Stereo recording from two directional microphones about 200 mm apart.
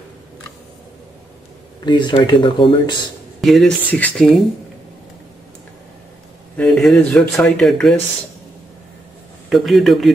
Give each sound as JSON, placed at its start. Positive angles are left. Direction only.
{"t": 1.9, "sound": "speech", "side_deg": 25}
{"t": 3.3, "sound": "speech", "side_deg": 0}
{"t": 6.5, "sound": "speech", "side_deg": 5}
{"t": 9.5, "sound": "speech", "side_deg": 0}